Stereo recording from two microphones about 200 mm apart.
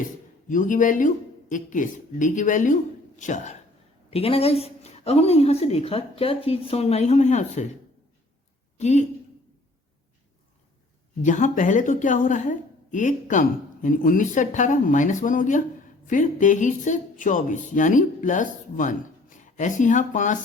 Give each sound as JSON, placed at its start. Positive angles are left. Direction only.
{"t": 0.4, "sound": "speech", "side_deg": 40}
{"t": 8.8, "sound": "speech", "side_deg": 35}
{"t": 11.2, "sound": "speech", "side_deg": 40}